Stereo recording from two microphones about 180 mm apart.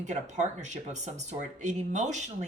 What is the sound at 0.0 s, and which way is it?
Speech, 40° right (ahead or behind).